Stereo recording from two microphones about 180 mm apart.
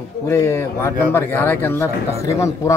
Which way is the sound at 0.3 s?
15° left (ahead or behind).